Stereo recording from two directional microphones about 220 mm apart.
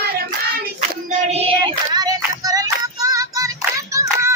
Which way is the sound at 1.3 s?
30° right (ahead or behind).